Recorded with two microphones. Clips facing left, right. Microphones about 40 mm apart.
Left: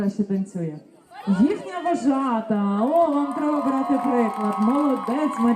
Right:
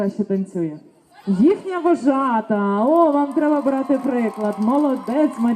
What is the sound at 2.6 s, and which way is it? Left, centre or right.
Carnatic music, right.